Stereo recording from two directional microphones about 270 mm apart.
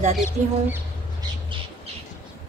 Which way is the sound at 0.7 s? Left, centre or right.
Centre.